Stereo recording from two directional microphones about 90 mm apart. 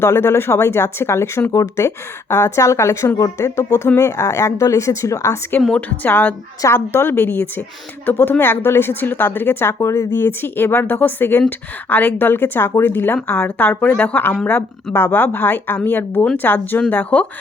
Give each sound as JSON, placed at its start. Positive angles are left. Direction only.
{"t": 0.0, "sound": "a woman's voice", "side_deg": 30}
{"t": 5.7, "sound": "a woman's voice", "side_deg": 20}